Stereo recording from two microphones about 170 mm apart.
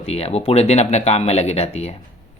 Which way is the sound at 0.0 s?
35° left (ahead or behind).